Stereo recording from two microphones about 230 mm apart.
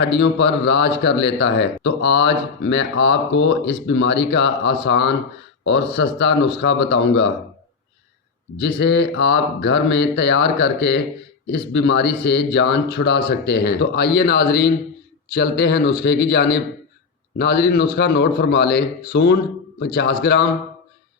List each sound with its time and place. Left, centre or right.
0.1 s a man's voice: left
8.5 s a man's voice: left